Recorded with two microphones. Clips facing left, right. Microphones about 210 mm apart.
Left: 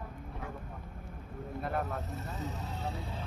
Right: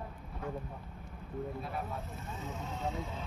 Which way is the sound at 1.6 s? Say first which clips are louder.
Left 5 dB; 70° left (ahead or behind).